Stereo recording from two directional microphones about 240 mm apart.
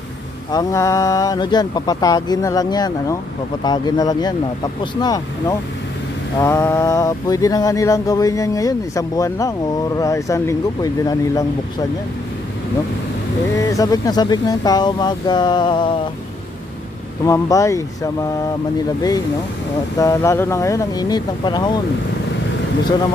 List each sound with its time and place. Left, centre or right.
0.5 s mantra: centre
13.6 s mantra: centre
17.2 s mantra: centre
20.0 s mantra: centre